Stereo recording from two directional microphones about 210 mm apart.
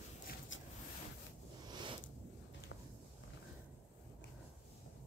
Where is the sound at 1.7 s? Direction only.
20° right (ahead or behind).